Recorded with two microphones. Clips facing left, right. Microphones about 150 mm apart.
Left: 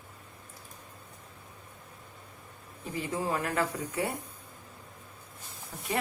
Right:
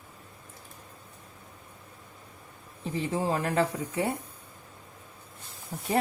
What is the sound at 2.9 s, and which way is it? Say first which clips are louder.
Speech: right 3 dB; 30° right (ahead or behind).